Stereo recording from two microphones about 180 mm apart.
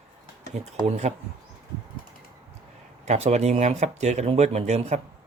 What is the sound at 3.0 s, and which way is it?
Speech, 40° right (ahead or behind).